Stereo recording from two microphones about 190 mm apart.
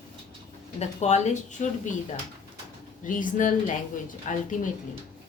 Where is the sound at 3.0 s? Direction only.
45° left (ahead or behind).